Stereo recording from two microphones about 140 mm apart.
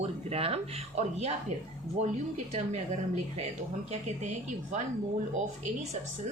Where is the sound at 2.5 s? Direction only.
50° right (ahead or behind).